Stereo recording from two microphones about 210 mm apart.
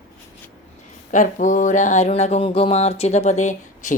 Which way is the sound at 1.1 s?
35° left (ahead or behind).